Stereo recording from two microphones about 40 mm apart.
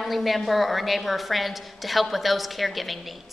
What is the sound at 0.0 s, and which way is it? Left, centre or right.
A woman's voice, centre.